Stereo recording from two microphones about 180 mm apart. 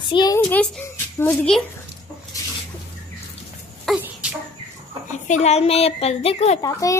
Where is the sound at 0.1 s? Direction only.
20° left (ahead or behind).